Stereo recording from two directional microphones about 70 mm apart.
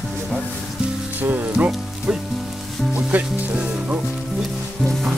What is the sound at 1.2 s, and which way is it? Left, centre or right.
Music, right.